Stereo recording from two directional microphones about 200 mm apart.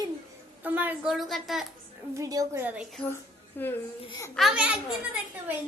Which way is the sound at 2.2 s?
15° right (ahead or behind).